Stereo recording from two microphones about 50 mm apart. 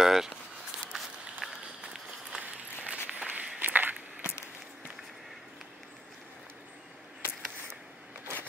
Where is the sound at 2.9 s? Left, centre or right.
Right.